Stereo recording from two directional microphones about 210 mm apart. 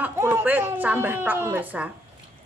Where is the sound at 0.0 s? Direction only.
10° right (ahead or behind).